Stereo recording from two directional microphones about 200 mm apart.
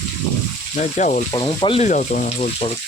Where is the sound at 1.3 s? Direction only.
25° left (ahead or behind).